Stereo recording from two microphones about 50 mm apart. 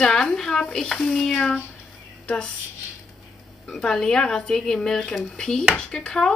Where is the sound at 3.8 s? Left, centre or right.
Centre.